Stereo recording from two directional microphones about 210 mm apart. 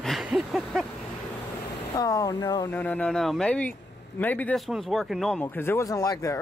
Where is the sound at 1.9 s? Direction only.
15° left (ahead or behind).